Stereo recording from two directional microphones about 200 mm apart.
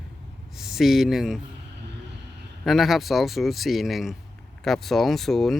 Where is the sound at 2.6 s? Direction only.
Centre (ahead or behind).